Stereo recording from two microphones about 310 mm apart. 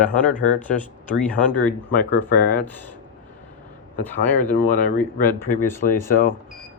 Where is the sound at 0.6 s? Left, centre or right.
Centre.